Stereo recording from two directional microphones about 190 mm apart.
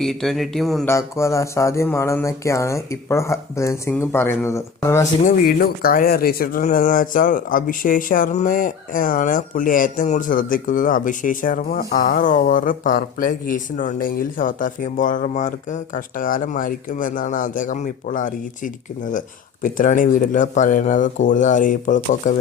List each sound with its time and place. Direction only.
0.0 s a man's voice: centre (ahead or behind)
0.9 s speech: 15° left (ahead or behind)
5.2 s speech: 50° left (ahead or behind)